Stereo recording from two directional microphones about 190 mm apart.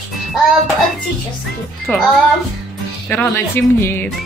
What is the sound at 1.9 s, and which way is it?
A woman's voice, 10° left (ahead or behind).